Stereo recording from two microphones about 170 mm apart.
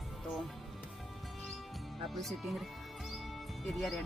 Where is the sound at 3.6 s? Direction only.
Centre (ahead or behind).